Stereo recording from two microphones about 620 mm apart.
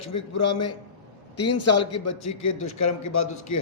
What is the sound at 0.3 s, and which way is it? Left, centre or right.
A man's voice, left.